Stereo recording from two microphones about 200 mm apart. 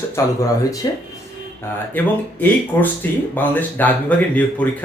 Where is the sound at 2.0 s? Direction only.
10° left (ahead or behind).